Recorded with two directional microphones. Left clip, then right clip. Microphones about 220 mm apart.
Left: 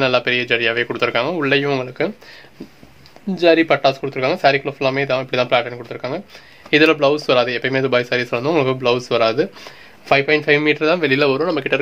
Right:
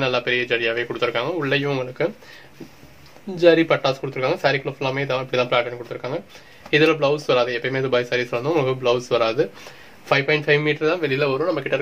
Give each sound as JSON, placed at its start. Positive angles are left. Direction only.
{"t": 0.0, "sound": "speech", "side_deg": 45}
{"t": 3.3, "sound": "speech", "side_deg": 40}